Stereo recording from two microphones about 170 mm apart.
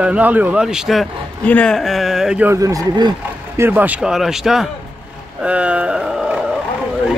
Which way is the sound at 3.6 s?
10° right (ahead or behind).